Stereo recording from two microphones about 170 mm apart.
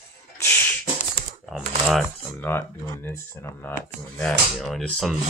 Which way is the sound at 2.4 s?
10° left (ahead or behind).